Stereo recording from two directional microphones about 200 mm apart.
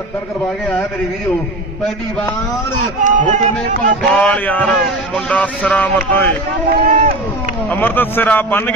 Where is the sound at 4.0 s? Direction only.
Centre (ahead or behind).